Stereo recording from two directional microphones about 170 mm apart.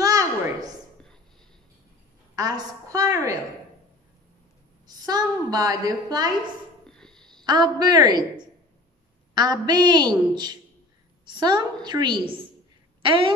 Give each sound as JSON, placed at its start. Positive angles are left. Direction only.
{"t": 0.0, "sound": "a sound", "side_deg": -20}
{"t": 2.3, "sound": "a woman's voice", "side_deg": -20}
{"t": 4.8, "sound": "a woman's voice", "side_deg": -25}
{"t": 6.9, "sound": "a sound", "side_deg": 5}
{"t": 7.4, "sound": "a woman's voice", "side_deg": -25}
{"t": 9.3, "sound": "a woman's voice", "side_deg": -25}